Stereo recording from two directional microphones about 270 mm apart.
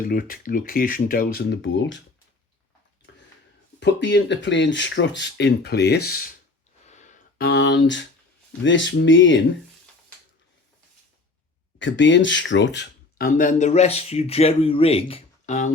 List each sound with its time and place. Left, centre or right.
0.0 s speech: left
3.8 s speech: left
6.8 s a sound: left
8.6 s speech: left
11.8 s speech: left